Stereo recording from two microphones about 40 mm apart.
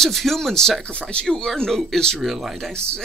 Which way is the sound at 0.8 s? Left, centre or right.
Left.